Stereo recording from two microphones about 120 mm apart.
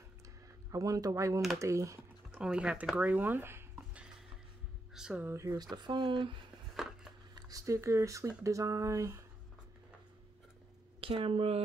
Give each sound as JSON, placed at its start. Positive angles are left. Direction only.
{"t": 0.7, "sound": "speech", "side_deg": -30}
{"t": 2.3, "sound": "speech", "side_deg": -10}
{"t": 5.2, "sound": "speech", "side_deg": -25}
{"t": 7.3, "sound": "speech", "side_deg": -30}
{"t": 11.0, "sound": "speech", "side_deg": -50}